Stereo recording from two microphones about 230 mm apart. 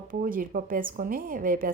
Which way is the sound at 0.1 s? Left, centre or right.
Right.